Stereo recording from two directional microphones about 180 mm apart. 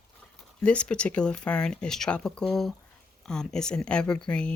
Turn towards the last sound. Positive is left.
turn(degrees=5)  # may be behind; listen again after turning